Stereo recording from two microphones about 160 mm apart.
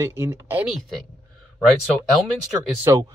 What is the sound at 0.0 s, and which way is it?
Speech, 15° right (ahead or behind).